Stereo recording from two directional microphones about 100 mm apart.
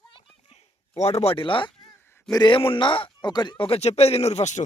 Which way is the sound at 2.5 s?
60° left (ahead or behind).